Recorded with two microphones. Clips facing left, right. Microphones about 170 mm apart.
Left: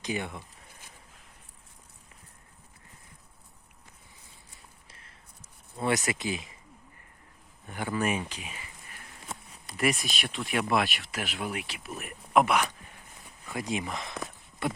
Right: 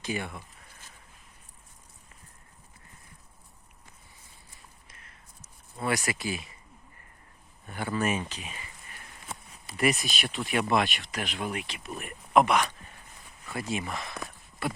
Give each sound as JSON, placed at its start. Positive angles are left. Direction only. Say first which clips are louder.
{"t": 0.0, "sound": "a sound", "louder": "even", "side_deg": 20}
{"t": 4.9, "sound": "a sound", "louder": "even", "side_deg": 30}
{"t": 5.7, "sound": "speech", "louder": "left 2 dB", "side_deg": 20}
{"t": 7.7, "sound": "speech", "louder": "even", "side_deg": 15}
{"t": 9.6, "sound": "speech", "louder": "right 1 dB", "side_deg": 0}
{"t": 13.5, "sound": "speech", "louder": "even", "side_deg": 15}